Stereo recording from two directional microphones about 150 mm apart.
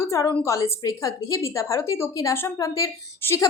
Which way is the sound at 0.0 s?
20° left (ahead or behind).